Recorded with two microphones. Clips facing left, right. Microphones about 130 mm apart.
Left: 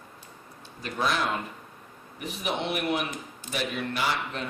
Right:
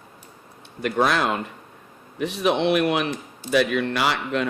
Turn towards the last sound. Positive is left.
turn(degrees=-75)  # may be behind; listen again after turning